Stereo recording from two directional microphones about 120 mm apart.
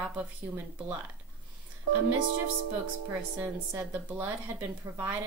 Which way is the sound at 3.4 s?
15° right (ahead or behind).